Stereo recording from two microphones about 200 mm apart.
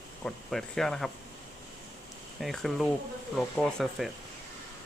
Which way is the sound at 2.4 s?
Centre (ahead or behind).